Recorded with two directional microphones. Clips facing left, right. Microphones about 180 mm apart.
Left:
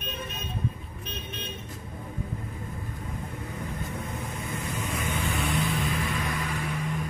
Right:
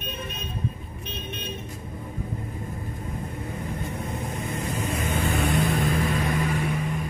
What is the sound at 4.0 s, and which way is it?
Vehicle, 30° right (ahead or behind).